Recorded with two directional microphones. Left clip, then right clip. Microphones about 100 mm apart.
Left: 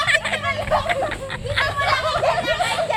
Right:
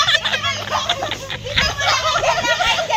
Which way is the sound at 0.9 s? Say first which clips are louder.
Right 1 dB; 5° left (ahead or behind).